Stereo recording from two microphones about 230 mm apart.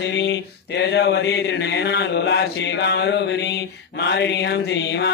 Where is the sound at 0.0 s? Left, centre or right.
Left.